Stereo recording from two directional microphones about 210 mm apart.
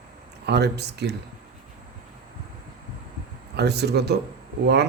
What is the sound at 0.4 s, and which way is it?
Speech, 50° right (ahead or behind).